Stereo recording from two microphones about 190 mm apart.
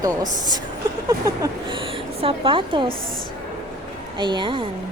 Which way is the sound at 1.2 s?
25° right (ahead or behind).